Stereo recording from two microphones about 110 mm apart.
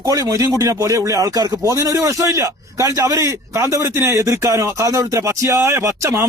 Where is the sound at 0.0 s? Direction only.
35° right (ahead or behind).